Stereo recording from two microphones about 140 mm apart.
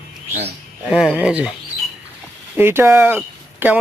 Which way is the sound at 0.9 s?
5° right (ahead or behind).